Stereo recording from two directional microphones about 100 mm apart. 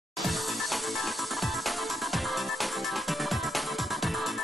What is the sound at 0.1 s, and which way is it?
Music, centre (ahead or behind).